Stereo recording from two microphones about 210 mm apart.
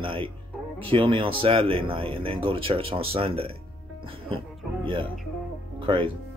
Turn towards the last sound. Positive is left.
turn(degrees=-25)  # may be behind; listen again after turning